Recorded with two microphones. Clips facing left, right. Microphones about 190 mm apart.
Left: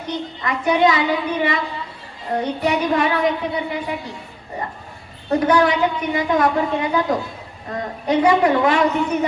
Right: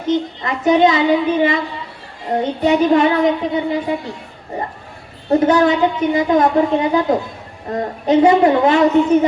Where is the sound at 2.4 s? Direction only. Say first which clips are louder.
Right 6 dB; 25° right (ahead or behind).